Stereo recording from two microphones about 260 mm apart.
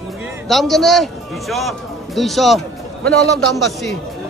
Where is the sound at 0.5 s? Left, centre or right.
Centre.